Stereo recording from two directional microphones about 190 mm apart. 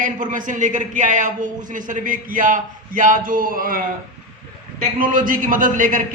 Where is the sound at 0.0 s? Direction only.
45° right (ahead or behind).